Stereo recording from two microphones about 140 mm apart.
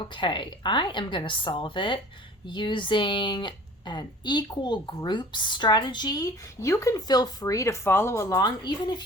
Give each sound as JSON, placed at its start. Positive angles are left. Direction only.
{"t": 0.1, "sound": "speech", "side_deg": 35}